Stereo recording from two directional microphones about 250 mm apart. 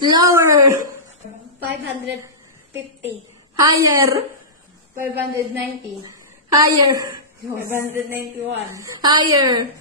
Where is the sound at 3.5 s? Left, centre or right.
Centre.